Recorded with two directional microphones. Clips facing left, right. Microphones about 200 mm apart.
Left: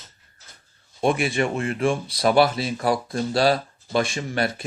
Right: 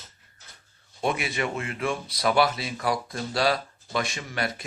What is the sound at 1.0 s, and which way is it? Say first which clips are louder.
Speech: left 6 dB; 50° left (ahead or behind).